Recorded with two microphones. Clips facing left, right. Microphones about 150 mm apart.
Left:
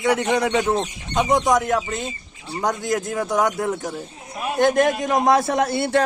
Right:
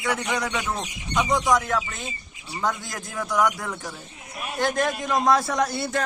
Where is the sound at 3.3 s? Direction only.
25° left (ahead or behind).